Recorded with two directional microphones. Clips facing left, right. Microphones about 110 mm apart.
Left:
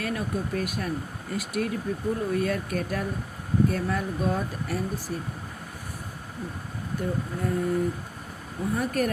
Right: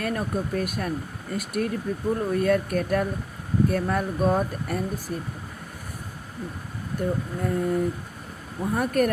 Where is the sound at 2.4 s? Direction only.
50° right (ahead or behind).